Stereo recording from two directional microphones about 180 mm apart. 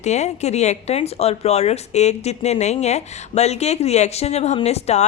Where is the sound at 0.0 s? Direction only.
40° left (ahead or behind).